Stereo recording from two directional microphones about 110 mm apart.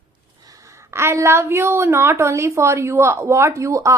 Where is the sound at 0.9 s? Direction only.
25° right (ahead or behind).